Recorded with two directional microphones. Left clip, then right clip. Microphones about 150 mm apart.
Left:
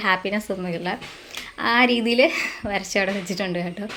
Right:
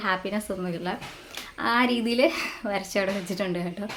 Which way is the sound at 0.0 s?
15° left (ahead or behind).